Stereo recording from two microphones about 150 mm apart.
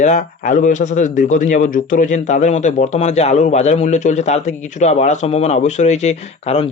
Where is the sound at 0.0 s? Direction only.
55° left (ahead or behind).